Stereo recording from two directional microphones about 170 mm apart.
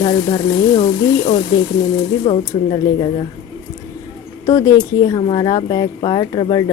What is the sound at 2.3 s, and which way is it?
Speech, 35° left (ahead or behind).